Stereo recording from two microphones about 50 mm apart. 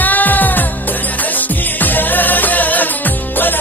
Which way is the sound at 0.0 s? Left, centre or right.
Left.